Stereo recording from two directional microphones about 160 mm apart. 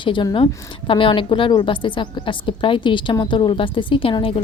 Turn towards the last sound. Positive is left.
turn(degrees=35)  # may be behind; listen again after turning